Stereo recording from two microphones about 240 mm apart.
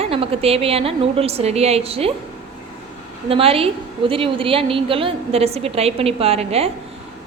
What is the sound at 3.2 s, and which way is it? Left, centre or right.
A woman's voice, right.